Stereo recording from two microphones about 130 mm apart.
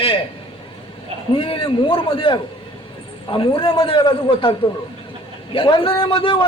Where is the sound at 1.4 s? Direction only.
45° left (ahead or behind).